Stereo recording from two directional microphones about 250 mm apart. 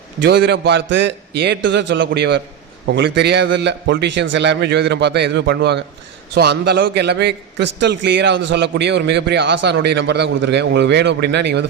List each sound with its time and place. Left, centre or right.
0.2 s a man's voice: right